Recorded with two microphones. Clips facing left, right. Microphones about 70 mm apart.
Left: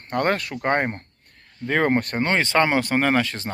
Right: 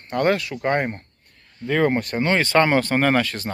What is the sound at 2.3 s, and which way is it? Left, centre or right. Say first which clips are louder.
Speech: right 2 dB; left.